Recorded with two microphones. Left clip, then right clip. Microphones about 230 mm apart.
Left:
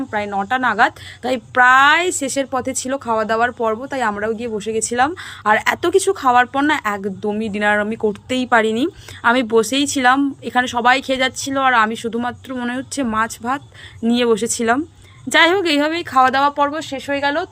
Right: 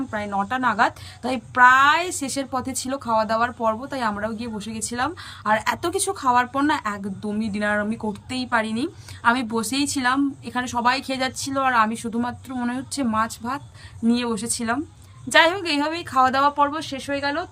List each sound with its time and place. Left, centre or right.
0.1 s a woman's voice: centre